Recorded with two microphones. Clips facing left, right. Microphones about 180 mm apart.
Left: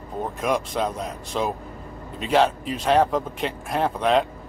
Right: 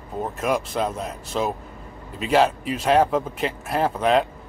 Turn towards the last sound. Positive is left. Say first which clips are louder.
# right 1 dB
turn(degrees=0)  # may be behind; listen again after turning